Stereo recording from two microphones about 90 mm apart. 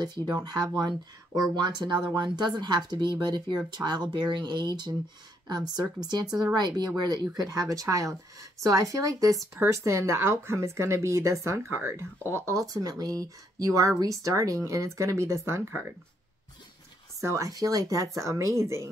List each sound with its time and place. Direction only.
0.0 s speech: 50° right (ahead or behind); by 15.8 s 30° right (ahead or behind)
17.2 s speech: 35° right (ahead or behind)